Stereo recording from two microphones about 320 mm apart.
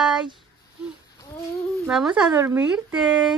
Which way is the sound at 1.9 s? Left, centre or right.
Centre.